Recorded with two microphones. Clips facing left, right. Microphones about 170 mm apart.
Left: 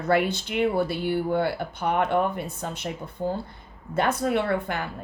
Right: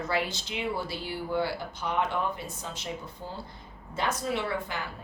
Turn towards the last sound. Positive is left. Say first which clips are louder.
# left 7 dB
turn(degrees=60)  # may be behind; listen again after turning